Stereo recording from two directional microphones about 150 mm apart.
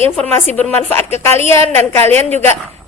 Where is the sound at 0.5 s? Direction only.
10° left (ahead or behind).